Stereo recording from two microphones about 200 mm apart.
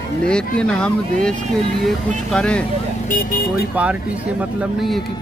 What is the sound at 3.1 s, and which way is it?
Speech, 45° left (ahead or behind).